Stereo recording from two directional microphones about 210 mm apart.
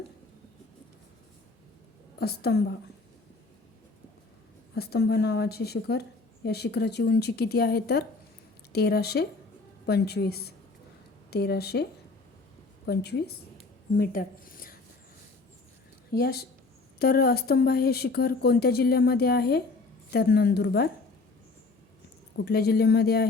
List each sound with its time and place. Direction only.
2.1 s a woman's voice: 50° left (ahead or behind)
4.7 s speech: 50° left (ahead or behind)
16.1 s speech: 50° left (ahead or behind)
22.4 s speech: 50° left (ahead or behind)